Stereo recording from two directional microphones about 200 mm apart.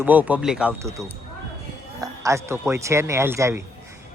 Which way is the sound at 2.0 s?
15° right (ahead or behind).